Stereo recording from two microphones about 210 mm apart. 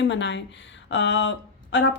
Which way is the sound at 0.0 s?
60° left (ahead or behind).